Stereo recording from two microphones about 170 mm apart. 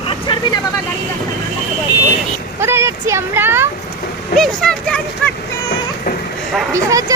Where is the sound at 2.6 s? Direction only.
15° right (ahead or behind).